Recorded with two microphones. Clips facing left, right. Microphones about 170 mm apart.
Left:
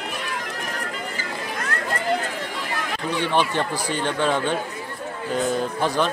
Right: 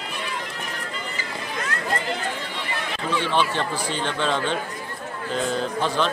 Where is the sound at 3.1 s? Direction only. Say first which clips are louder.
Left 1 dB; 15° left (ahead or behind).